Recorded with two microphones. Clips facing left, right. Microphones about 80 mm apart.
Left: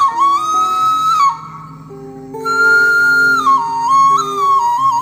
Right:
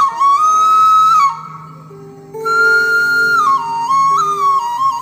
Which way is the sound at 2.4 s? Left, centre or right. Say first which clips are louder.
Left 1 dB; left.